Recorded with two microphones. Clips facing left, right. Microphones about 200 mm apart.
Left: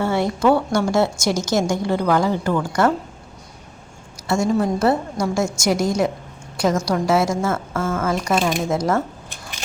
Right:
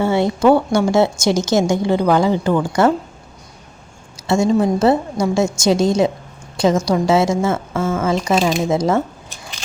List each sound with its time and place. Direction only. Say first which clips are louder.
0.0 s a sound: right 4 dB; 25° right (ahead or behind)
0.4 s a woman's voice: right 4 dB; 25° right (ahead or behind)
4.3 s a woman's voice: right 4 dB; 20° right (ahead or behind)